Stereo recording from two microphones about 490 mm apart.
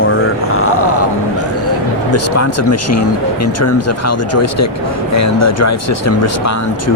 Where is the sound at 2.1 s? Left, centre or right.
Left.